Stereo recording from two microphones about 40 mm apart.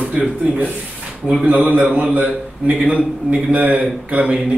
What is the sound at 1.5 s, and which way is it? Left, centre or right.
Speech, right.